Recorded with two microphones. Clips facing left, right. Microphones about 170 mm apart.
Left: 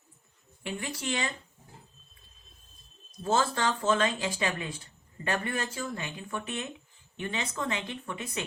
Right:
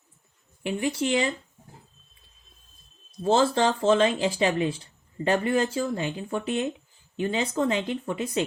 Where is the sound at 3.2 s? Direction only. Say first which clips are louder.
Right 7 dB; 25° right (ahead or behind).